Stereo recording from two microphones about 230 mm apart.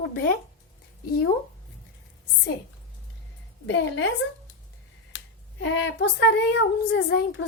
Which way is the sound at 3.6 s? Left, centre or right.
Left.